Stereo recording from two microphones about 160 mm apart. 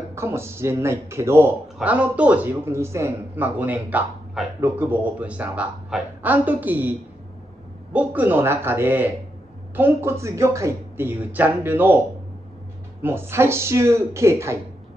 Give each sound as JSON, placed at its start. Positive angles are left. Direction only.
{"t": 0.1, "sound": "a man's voice", "side_deg": -15}
{"t": 13.0, "sound": "a man's voice", "side_deg": -15}